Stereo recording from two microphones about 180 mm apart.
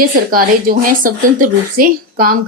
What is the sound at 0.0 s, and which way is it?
Speech, 55° right (ahead or behind).